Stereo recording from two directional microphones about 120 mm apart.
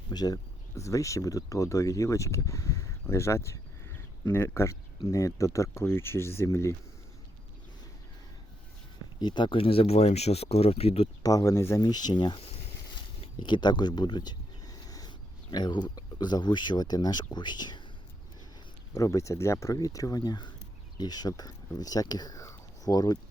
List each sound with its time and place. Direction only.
0.1 s speech: 35° left (ahead or behind)
9.1 s speech: 35° left (ahead or behind); by 11.1 s 55° left (ahead or behind)
11.2 s speech: 30° left (ahead or behind)
11.8 s speech: 35° left (ahead or behind)
18.9 s speech: 25° left (ahead or behind)